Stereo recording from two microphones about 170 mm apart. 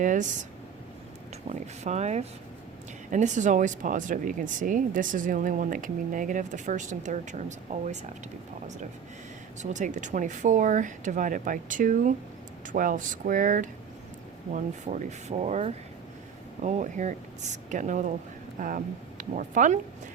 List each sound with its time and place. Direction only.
0.0 s speech: 50° right (ahead or behind)
1.5 s speech: 40° right (ahead or behind)
9.6 s speech: 45° right (ahead or behind)